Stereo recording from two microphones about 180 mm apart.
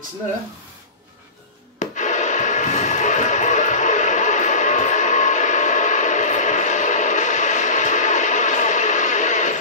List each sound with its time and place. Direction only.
1.8 s music: 40° left (ahead or behind)